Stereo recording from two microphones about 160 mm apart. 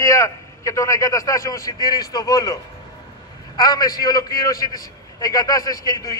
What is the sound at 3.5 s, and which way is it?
A man's voice, 25° left (ahead or behind).